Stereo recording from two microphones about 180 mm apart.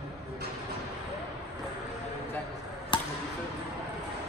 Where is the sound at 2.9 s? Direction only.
25° left (ahead or behind).